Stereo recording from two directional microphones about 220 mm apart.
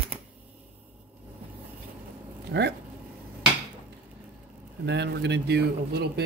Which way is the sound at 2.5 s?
50° right (ahead or behind).